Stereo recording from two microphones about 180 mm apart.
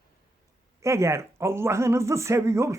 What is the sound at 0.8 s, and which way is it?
Speech, 15° right (ahead or behind).